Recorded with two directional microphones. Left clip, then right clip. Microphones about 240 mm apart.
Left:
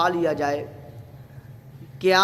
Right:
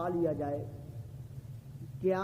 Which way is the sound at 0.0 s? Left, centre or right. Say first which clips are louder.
Left 11 dB; centre.